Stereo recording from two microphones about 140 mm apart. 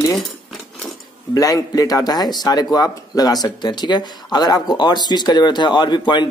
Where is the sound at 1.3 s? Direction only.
25° left (ahead or behind).